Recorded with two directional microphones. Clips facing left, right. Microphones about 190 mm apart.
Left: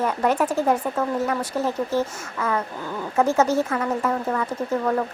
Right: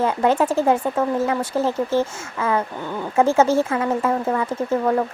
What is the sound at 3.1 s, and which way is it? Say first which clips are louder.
Speech: right 3 dB; 25° right (ahead or behind).